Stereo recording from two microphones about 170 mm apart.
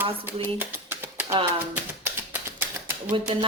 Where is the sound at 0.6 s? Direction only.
15° right (ahead or behind).